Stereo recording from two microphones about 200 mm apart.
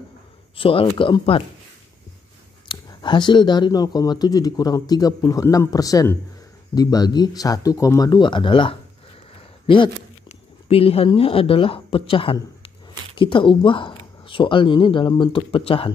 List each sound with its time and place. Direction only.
0.6 s speech: 25° left (ahead or behind)
2.7 s speech: 25° left (ahead or behind)